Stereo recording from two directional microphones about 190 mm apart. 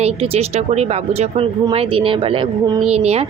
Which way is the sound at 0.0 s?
30° right (ahead or behind).